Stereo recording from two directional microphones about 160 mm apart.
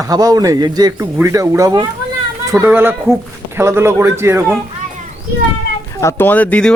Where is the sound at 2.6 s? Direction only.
10° right (ahead or behind).